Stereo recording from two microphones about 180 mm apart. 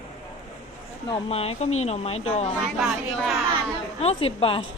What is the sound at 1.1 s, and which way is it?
Speech, 35° left (ahead or behind).